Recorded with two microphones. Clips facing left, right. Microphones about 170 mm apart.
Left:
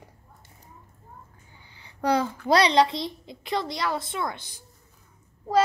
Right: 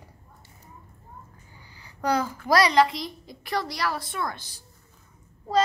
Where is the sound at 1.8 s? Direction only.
25° left (ahead or behind).